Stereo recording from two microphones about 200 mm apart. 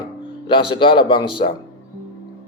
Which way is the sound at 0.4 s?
25° left (ahead or behind).